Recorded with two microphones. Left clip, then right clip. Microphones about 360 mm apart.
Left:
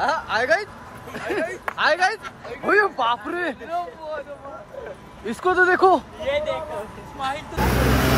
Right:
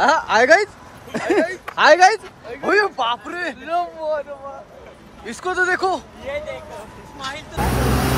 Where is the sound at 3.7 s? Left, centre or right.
Right.